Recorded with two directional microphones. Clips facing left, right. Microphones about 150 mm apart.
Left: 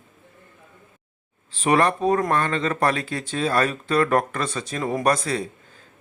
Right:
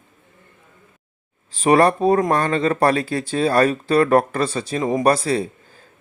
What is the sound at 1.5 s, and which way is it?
Speech, 35° right (ahead or behind).